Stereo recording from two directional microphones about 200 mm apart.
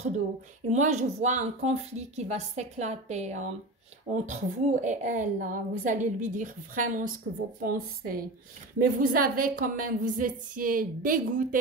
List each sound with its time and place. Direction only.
0.7 s a woman's voice: 35° right (ahead or behind)